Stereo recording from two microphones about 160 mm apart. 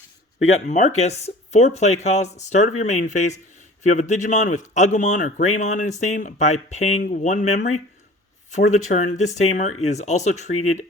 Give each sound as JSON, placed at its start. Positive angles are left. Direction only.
{"t": 0.7, "sound": "a man's voice", "side_deg": 45}